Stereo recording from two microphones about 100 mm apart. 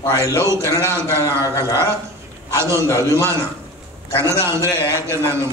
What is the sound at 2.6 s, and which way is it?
A man's voice, 25° right (ahead or behind).